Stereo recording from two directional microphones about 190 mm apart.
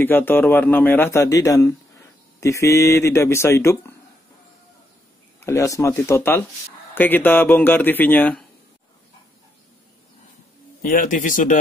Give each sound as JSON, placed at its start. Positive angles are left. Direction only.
{"t": 0.0, "sound": "a man's voice", "side_deg": 10}
{"t": 5.4, "sound": "a man's voice", "side_deg": 15}
{"t": 10.8, "sound": "speech", "side_deg": 45}